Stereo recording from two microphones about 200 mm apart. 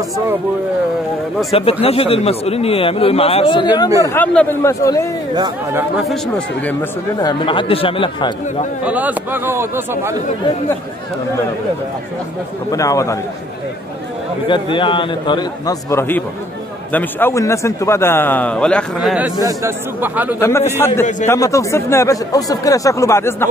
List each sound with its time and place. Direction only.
1.5 s speech: 30° left (ahead or behind)
4.0 s a man's voice: 10° left (ahead or behind)
5.3 s speech: 20° right (ahead or behind)
6.0 s speech: 5° left (ahead or behind); by 8.6 s 25° left (ahead or behind)
8.8 s speech: 10° right (ahead or behind)
12.7 s a man's voice: 15° left (ahead or behind)
14.5 s a man's voice: 25° left (ahead or behind); by 20.3 s 10° right (ahead or behind)
20.3 s a man's voice: 10° left (ahead or behind)